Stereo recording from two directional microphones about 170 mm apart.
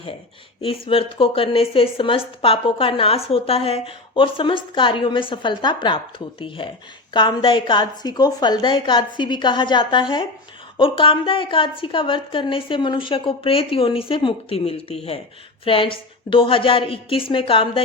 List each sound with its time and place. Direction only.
0.6 s a woman's voice: 35° left (ahead or behind)